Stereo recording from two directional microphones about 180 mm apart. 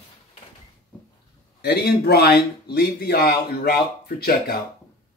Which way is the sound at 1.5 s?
65° left (ahead or behind).